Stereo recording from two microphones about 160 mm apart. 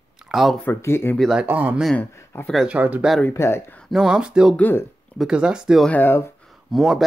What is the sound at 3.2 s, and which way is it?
Speech, 15° left (ahead or behind).